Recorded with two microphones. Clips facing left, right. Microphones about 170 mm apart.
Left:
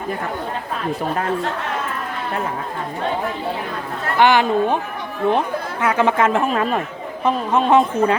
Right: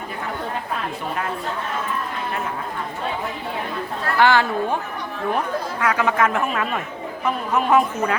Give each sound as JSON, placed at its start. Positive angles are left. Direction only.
{"t": 4.0, "sound": "speech", "side_deg": 20}